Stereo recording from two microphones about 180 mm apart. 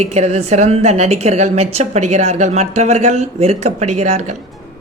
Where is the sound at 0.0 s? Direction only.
35° right (ahead or behind).